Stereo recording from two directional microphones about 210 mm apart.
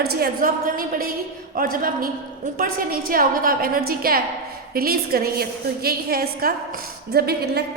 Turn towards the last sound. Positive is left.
turn(degrees=-50)  # may be behind; listen again after turning